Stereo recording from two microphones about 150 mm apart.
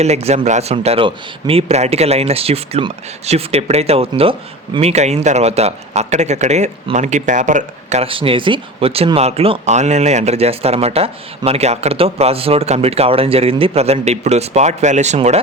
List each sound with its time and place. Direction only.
0.0 s a man's voice: 45° right (ahead or behind)